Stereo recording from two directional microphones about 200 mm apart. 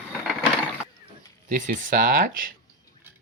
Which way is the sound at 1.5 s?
40° right (ahead or behind).